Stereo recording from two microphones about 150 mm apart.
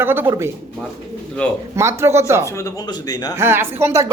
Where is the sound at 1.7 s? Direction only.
15° right (ahead or behind).